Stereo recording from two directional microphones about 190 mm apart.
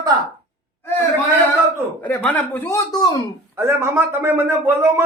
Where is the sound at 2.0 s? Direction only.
10° left (ahead or behind).